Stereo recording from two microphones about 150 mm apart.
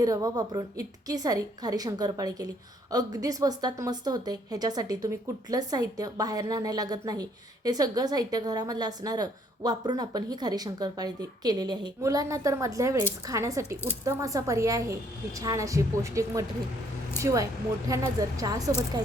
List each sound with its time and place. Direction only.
0.0 s a woman's voice: 25° right (ahead or behind)